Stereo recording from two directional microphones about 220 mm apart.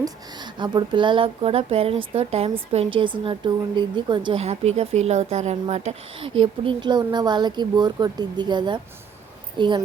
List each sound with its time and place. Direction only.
0.0 s speech: 20° right (ahead or behind)